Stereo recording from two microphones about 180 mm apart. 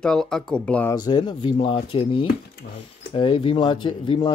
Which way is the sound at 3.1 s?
30° left (ahead or behind).